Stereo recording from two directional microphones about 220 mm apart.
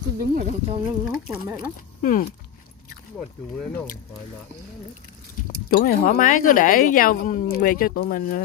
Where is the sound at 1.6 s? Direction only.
40° left (ahead or behind).